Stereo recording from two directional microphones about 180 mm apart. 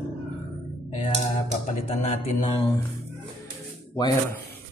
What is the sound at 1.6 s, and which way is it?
Speech, 40° left (ahead or behind).